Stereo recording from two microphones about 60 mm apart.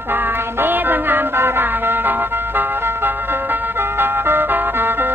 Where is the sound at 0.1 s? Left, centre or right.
Right.